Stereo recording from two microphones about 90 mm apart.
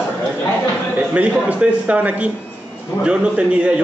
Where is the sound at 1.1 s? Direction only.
15° right (ahead or behind).